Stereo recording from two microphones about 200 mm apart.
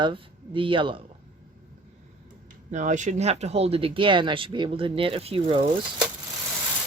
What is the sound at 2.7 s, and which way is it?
Speech, 40° right (ahead or behind).